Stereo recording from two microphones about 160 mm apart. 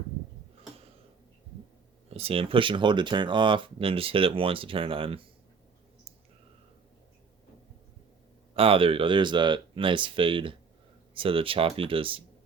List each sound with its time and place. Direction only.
2.0 s speech: 40° right (ahead or behind)
8.5 s speech: 35° right (ahead or behind)